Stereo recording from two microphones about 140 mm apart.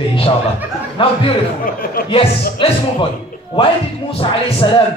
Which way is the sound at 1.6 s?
90° left.